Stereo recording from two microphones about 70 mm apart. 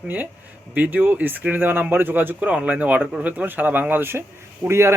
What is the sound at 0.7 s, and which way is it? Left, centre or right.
A man's voice, right.